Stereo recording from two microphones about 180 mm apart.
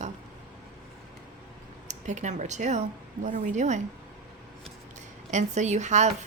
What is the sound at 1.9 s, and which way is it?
Speech, 40° right (ahead or behind).